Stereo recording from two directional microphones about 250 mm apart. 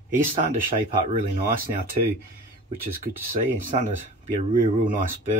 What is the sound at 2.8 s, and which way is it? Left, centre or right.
Speech, right.